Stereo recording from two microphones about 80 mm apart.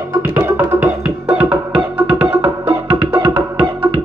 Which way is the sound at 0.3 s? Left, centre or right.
Right.